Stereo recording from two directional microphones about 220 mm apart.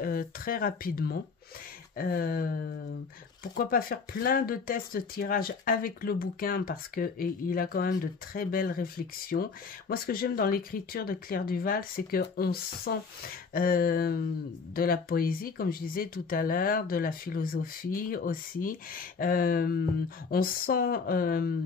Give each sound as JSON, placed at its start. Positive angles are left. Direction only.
{"t": 0.0, "sound": "speech", "side_deg": 40}